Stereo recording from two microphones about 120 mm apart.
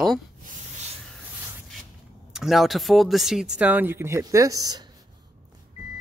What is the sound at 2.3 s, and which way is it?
Speech, centre (ahead or behind).